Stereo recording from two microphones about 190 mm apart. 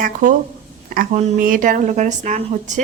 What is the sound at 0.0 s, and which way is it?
A woman's voice, 45° right (ahead or behind).